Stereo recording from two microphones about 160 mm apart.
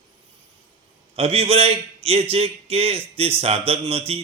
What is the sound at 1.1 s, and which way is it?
A man's voice, 40° right (ahead or behind).